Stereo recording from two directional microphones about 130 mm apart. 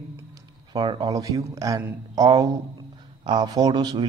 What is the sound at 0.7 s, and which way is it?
A man's voice, 30° right (ahead or behind).